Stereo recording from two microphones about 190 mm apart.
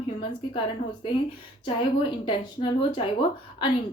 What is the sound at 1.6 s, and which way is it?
A woman's voice, 25° left (ahead or behind).